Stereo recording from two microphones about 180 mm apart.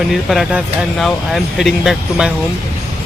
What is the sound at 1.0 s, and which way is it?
Speech, centre (ahead or behind).